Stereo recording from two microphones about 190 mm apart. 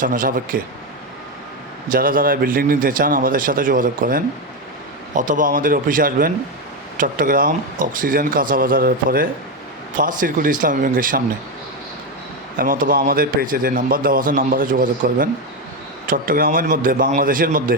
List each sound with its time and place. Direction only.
0.0 s a man's voice: 45° right (ahead or behind)
1.9 s a man's voice: 45° right (ahead or behind)
12.5 s a man's voice: 45° right (ahead or behind)